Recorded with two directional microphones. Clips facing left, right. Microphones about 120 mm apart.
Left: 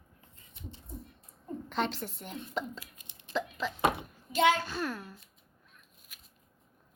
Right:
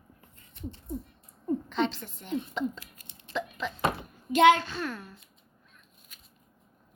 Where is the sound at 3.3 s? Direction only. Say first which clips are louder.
Even; centre (ahead or behind).